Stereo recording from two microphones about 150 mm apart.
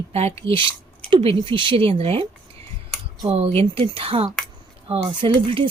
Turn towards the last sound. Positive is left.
turn(degrees=-35)  # may be behind; listen again after turning